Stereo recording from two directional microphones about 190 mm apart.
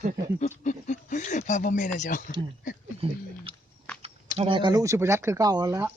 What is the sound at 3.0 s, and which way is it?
Speech, 30° right (ahead or behind).